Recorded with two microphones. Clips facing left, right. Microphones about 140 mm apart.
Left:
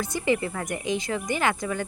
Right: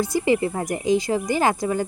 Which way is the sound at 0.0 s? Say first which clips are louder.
Right 5 dB; 30° right (ahead or behind).